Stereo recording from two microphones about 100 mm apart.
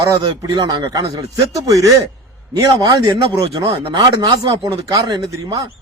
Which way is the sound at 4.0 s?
40° right (ahead or behind).